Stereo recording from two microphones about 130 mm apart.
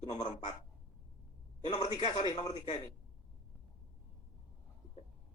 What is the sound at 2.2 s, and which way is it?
Speech, 35° left (ahead or behind).